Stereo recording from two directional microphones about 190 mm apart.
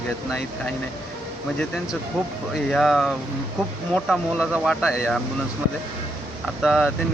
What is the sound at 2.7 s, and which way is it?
Speech, centre (ahead or behind).